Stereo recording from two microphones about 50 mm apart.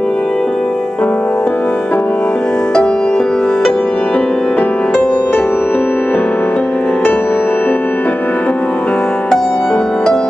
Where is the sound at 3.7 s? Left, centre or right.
Left.